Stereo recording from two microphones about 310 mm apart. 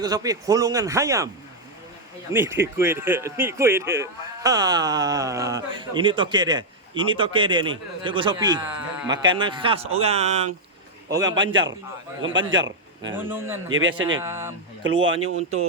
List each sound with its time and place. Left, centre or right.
0.0 s a man's voice: centre
2.3 s a man's voice: centre
12.2 s a man's voice: right
13.1 s a man's voice: centre
13.7 s a man's voice: right
14.2 s a man's voice: centre
15.0 s a man's voice: right